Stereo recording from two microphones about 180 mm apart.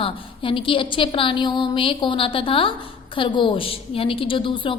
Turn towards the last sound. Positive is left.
turn(degrees=30)  # may be behind; listen again after turning